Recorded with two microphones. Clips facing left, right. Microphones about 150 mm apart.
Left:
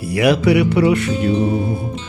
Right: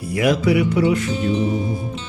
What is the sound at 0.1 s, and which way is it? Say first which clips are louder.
Speech: left 3 dB; 75° left (ahead or behind).